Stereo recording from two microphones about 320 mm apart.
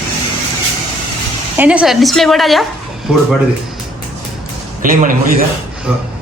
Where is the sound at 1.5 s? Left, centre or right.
Centre.